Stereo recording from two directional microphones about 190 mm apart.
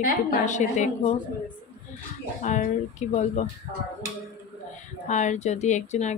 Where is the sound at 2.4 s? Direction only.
40° left (ahead or behind).